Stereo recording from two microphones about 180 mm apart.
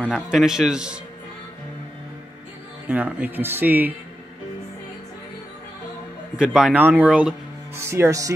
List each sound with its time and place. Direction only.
0.0 s speech: centre (ahead or behind)
2.9 s speech: 10° right (ahead or behind)
6.3 s speech: 5° right (ahead or behind)
7.9 s speech: 15° right (ahead or behind)